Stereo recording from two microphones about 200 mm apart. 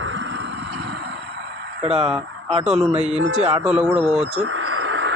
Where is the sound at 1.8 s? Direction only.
30° right (ahead or behind).